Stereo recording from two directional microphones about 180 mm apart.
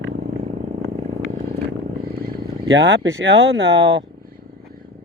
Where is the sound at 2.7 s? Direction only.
85° right.